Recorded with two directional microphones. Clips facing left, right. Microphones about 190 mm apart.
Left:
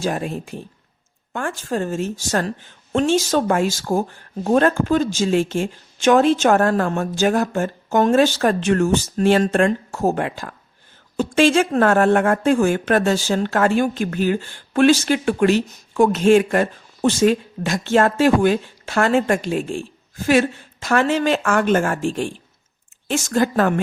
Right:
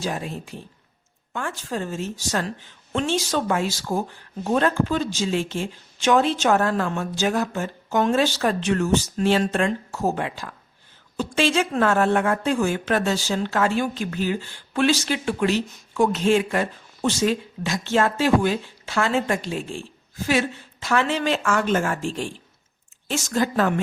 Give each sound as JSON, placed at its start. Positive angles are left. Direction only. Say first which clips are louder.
{"t": 0.0, "sound": "a woman's voice", "louder": "left 5 dB", "side_deg": 50}